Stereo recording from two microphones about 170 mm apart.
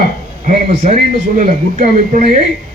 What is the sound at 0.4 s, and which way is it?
A man's voice, 45° right (ahead or behind).